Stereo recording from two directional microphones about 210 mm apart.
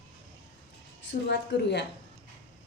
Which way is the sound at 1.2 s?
55° left (ahead or behind).